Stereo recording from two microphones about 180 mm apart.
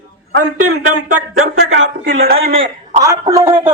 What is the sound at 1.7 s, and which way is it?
Speech, 90° right.